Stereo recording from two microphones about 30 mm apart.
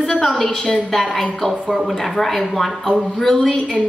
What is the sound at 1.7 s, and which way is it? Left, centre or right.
A woman's voice, centre.